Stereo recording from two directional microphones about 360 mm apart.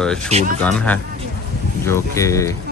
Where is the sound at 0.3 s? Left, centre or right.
Centre.